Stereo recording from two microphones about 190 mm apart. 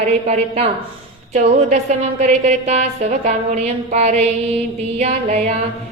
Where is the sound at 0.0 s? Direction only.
35° right (ahead or behind).